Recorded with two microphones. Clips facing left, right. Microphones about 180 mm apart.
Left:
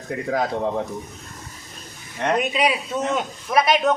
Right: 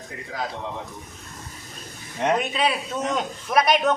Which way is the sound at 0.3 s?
50° left (ahead or behind).